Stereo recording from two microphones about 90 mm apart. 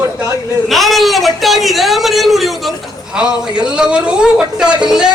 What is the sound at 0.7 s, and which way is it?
A man's voice, centre (ahead or behind).